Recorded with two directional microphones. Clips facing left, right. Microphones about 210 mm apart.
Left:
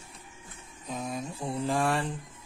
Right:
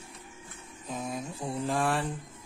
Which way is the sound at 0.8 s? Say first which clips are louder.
Left 1 dB; centre (ahead or behind).